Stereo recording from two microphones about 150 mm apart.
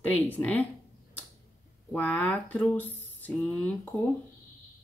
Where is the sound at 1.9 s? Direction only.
10° left (ahead or behind).